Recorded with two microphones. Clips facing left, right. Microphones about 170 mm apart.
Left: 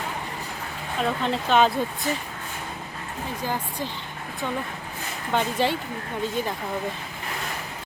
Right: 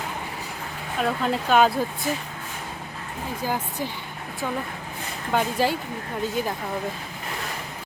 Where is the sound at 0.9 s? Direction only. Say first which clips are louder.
Right 1 dB; 5° right (ahead or behind).